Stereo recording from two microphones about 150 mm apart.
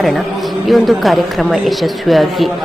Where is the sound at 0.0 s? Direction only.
Centre (ahead or behind).